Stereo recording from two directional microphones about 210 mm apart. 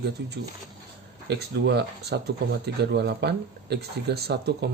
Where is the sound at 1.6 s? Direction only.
50° right (ahead or behind).